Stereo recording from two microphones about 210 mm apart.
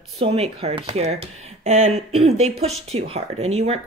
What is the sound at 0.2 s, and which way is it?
Speech, 30° right (ahead or behind).